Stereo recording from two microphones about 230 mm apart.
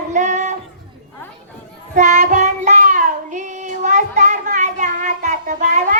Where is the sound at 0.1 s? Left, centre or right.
Right.